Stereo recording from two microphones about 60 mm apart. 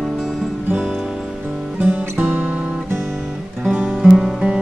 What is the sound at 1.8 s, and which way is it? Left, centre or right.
Music, right.